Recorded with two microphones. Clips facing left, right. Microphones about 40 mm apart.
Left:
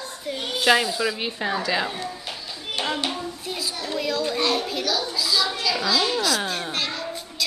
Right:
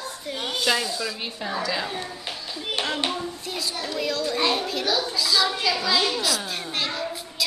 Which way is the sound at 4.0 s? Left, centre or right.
Centre.